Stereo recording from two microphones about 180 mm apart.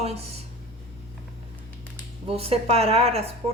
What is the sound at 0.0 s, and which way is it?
Speech, 35° right (ahead or behind).